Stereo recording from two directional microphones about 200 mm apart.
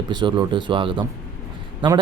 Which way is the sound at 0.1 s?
20° right (ahead or behind).